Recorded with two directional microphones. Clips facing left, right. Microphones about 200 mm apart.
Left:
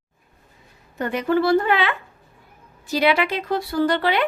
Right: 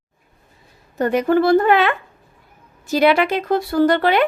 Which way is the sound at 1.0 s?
45° right (ahead or behind).